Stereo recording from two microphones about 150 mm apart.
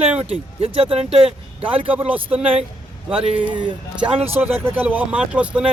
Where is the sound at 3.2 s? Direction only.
35° right (ahead or behind).